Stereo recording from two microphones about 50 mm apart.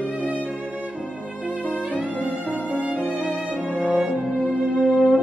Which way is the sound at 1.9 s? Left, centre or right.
Right.